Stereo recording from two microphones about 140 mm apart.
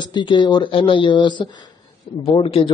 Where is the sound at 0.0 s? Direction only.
35° left (ahead or behind).